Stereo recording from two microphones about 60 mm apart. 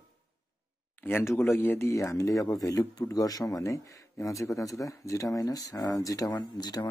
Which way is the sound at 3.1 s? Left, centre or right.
Left.